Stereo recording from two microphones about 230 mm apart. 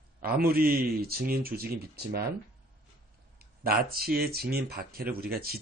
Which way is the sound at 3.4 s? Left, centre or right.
Right.